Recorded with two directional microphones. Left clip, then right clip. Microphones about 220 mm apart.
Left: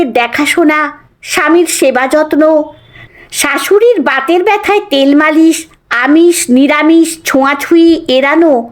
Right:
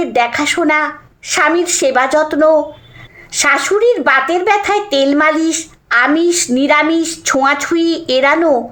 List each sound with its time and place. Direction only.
0.0 s a woman's voice: 40° left (ahead or behind)